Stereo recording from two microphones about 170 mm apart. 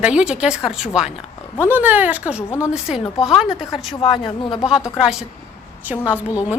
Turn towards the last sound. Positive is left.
turn(degrees=-10)  # may be behind; listen again after turning